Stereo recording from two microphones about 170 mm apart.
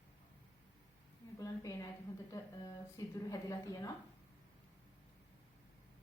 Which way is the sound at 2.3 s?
20° left (ahead or behind).